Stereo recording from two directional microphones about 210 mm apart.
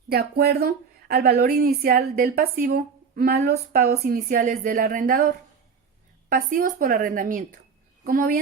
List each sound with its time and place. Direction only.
0.1 s a woman's voice: 50° right (ahead or behind)